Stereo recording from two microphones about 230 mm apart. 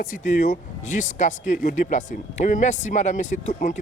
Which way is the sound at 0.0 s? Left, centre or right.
Left.